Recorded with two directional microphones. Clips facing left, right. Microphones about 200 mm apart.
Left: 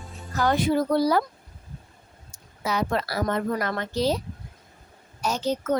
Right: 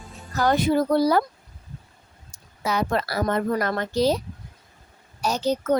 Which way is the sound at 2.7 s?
50° right (ahead or behind).